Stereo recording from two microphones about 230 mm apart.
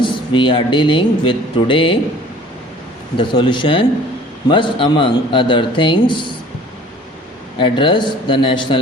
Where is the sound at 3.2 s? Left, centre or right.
Left.